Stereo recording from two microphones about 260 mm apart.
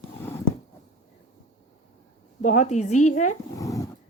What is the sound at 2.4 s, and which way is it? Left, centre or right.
Speech, left.